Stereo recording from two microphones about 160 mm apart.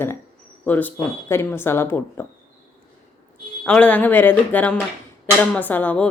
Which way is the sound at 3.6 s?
10° left (ahead or behind).